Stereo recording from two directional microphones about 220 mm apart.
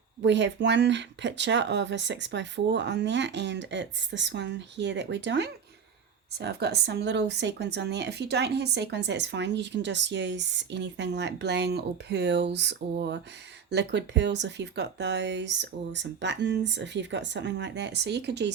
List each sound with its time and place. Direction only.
0.2 s speech: 55° right (ahead or behind)